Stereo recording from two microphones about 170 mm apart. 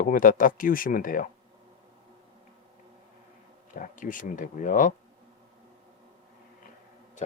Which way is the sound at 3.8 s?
50° left (ahead or behind).